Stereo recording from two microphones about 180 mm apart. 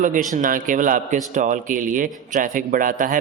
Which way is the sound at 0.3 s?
45° right (ahead or behind).